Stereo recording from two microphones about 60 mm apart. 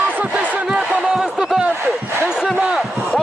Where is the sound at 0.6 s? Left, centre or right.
Centre.